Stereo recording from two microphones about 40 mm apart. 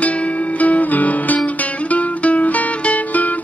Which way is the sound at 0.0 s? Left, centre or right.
Left.